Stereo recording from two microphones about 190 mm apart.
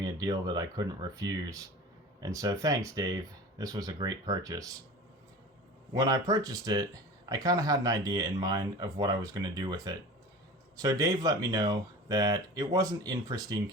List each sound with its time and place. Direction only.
0.0 s speech: 20° right (ahead or behind)
5.9 s speech: 20° right (ahead or behind)